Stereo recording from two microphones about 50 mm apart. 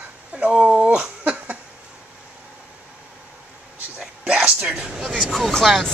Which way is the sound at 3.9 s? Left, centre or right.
Centre.